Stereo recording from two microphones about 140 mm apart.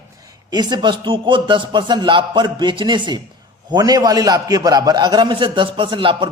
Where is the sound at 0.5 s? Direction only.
30° right (ahead or behind).